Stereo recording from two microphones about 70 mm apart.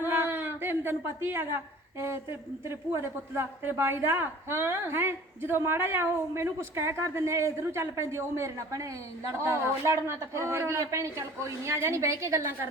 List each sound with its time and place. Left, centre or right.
0.0 s a woman's voice: right
9.3 s a woman's voice: right